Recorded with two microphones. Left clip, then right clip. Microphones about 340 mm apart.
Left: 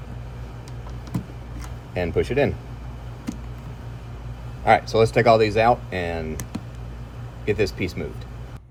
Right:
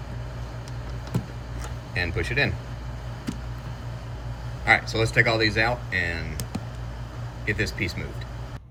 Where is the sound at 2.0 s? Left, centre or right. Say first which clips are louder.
Left 4 dB; left.